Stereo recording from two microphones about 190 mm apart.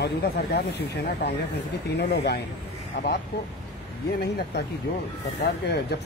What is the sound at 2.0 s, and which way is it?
Speech, 55° left (ahead or behind).